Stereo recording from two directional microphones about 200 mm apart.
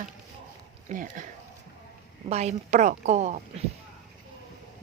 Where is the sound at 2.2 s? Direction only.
35° right (ahead or behind).